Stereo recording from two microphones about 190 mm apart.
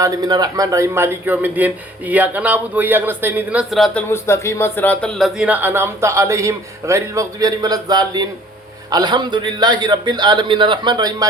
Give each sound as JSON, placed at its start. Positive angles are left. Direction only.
{"t": 0.0, "sound": "a man's voice", "side_deg": -20}
{"t": 4.1, "sound": "a man's voice", "side_deg": 15}